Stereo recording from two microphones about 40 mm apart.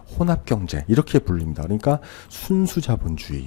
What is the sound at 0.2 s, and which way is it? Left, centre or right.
Speech, left.